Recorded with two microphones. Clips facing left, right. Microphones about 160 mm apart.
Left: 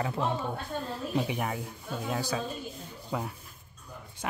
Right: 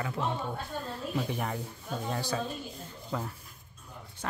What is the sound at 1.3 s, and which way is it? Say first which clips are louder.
Speech: left 1 dB; 5° left (ahead or behind).